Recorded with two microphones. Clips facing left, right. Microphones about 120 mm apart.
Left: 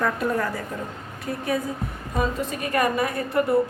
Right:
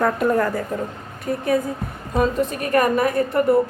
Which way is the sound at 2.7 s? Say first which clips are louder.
Right 4 dB; 50° right (ahead or behind).